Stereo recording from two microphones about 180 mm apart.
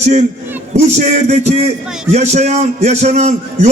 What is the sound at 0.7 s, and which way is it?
A man's voice, 40° right (ahead or behind).